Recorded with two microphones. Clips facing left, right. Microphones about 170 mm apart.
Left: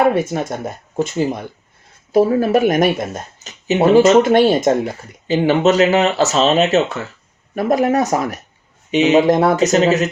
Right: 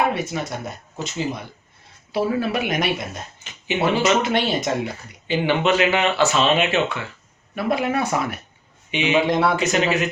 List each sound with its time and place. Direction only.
0.1 s speech: 50° left (ahead or behind)